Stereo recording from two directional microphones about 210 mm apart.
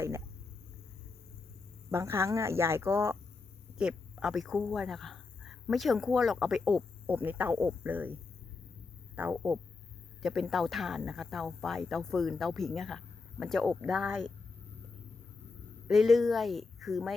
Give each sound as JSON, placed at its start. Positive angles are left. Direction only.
{"t": 1.9, "sound": "speech", "side_deg": -15}
{"t": 9.1, "sound": "speech", "side_deg": -10}
{"t": 15.9, "sound": "speech", "side_deg": 0}